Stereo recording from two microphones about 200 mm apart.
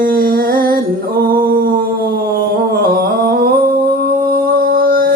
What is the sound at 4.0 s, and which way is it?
Music, 50° right (ahead or behind).